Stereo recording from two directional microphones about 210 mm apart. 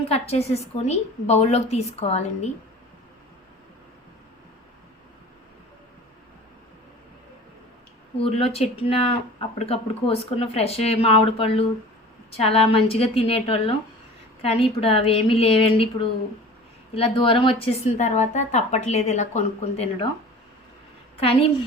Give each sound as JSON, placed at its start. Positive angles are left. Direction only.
{"t": 0.1, "sound": "speech", "side_deg": 30}
{"t": 8.2, "sound": "speech", "side_deg": 30}